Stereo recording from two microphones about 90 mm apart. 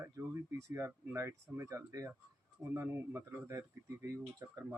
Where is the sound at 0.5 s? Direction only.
30° right (ahead or behind).